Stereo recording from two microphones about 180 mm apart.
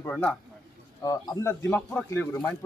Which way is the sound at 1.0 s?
20° left (ahead or behind).